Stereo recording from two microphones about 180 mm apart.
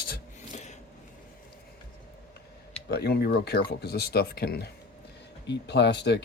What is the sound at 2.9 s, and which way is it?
Speech, 65° left (ahead or behind).